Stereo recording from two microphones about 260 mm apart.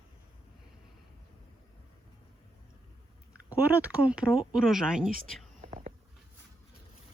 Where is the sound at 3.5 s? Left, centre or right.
Centre.